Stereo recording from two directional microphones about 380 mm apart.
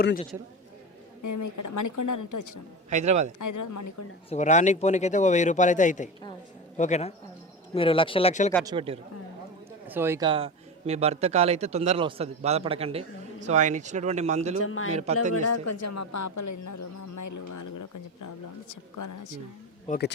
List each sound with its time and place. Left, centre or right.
0.0 s a man's voice: left
1.2 s speech: left
2.9 s speech: centre
3.3 s speech: left
4.3 s a man's voice: centre
8.6 s a man's voice: centre
14.6 s a man's voice: left
14.8 s a man's voice: centre
15.3 s speech: left
19.9 s a man's voice: left